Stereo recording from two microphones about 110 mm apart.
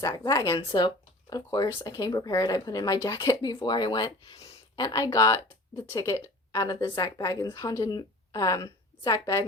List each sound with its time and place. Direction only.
0.0 s speech: 30° left (ahead or behind)
0.5 s speech: 50° left (ahead or behind); by 7.4 s 30° left (ahead or behind)
7.4 s speech: 40° left (ahead or behind)